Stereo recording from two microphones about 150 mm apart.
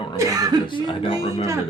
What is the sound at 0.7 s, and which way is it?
Speech, 30° left (ahead or behind).